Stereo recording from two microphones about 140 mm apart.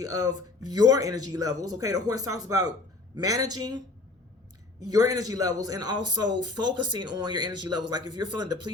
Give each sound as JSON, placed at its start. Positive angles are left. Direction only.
{"t": 0.7, "sound": "speech", "side_deg": -25}
{"t": 4.9, "sound": "a man's voice", "side_deg": -25}